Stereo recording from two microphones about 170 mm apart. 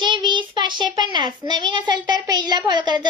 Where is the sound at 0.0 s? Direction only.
25° right (ahead or behind).